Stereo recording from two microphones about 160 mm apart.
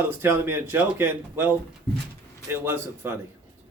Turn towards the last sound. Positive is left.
turn(degrees=-15)  # may be behind; listen again after turning